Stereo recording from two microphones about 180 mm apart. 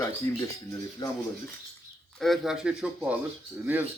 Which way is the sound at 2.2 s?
Centre (ahead or behind).